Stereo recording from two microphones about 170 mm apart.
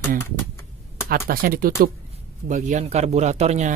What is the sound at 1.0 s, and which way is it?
A man's voice, 60° right (ahead or behind).